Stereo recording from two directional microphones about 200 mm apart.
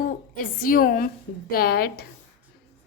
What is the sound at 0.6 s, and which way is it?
A woman's voice, 45° left (ahead or behind).